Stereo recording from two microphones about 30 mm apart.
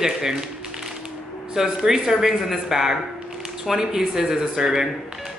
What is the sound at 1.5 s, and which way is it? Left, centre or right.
A woman's voice, centre.